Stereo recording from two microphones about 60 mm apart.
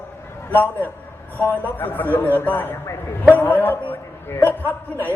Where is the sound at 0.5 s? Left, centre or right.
Left.